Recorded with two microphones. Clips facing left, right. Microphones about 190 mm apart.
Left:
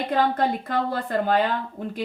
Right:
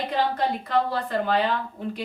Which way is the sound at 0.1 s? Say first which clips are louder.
Left 4 dB; 50° left (ahead or behind).